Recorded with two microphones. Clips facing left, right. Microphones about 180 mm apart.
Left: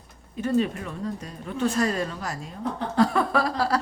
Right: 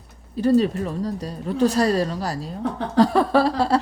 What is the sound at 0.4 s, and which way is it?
A woman's voice, 35° right (ahead or behind).